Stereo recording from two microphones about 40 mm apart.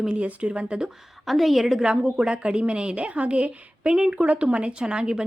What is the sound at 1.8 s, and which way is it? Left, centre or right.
A woman's voice, right.